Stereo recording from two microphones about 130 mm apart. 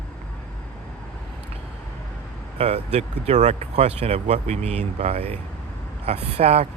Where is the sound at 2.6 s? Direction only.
55° right (ahead or behind).